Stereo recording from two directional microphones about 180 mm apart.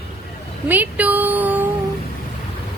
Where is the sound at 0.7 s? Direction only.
10° right (ahead or behind).